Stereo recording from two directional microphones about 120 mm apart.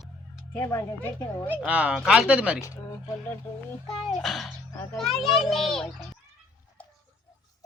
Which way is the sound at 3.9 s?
Centre (ahead or behind).